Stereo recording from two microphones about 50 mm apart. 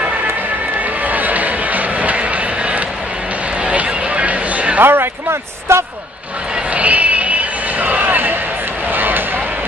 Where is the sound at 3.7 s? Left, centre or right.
Right.